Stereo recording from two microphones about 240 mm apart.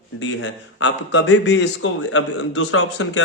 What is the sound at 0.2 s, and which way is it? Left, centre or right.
Speech, left.